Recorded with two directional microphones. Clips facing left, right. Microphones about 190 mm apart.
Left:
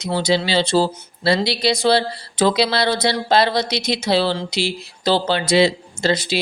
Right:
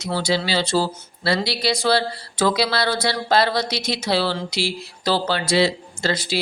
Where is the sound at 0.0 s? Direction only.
20° left (ahead or behind).